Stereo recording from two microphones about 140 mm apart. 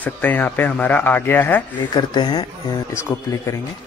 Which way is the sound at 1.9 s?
30° left (ahead or behind).